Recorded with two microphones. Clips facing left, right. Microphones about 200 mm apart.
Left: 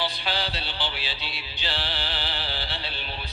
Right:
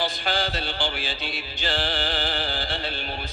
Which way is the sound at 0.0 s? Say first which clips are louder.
Right 3 dB; 45° right (ahead or behind).